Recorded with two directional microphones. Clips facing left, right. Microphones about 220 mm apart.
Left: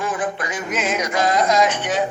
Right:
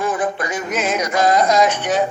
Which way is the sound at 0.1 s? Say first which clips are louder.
Right 3 dB; 40° right (ahead or behind).